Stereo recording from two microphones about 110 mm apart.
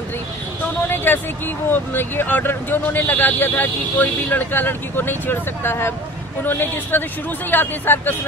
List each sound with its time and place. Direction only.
0.8 s a man's voice: 20° left (ahead or behind)